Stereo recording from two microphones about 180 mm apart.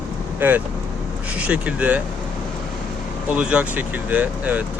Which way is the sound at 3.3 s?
5° right (ahead or behind).